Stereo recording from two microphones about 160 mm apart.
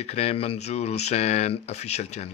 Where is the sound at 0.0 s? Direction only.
40° left (ahead or behind).